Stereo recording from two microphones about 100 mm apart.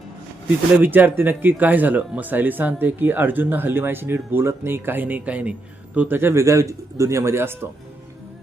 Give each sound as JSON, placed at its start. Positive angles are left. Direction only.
{"t": 0.8, "sound": "speech", "side_deg": -20}